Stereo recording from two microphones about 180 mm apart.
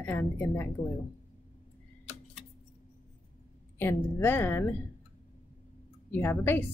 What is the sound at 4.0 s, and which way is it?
Speech, 10° left (ahead or behind).